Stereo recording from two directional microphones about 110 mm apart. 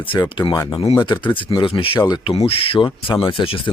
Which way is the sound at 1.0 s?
45° left (ahead or behind).